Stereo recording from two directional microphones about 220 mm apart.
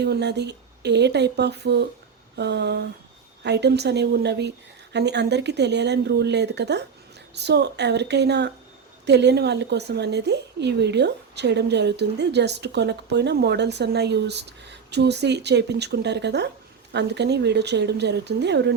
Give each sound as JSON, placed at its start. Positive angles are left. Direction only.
{"t": 0.0, "sound": "speech", "side_deg": -50}